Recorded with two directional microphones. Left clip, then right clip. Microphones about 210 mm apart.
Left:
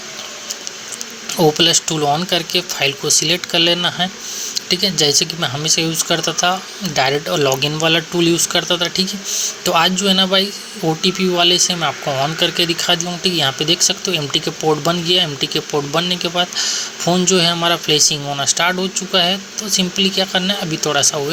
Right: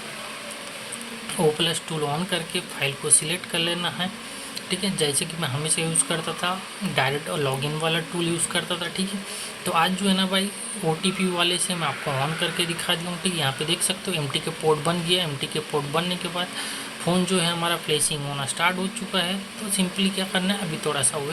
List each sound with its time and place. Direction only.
1.5 s speech: 25° left (ahead or behind)